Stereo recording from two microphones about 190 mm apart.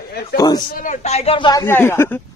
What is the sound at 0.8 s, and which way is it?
Speech, 35° left (ahead or behind).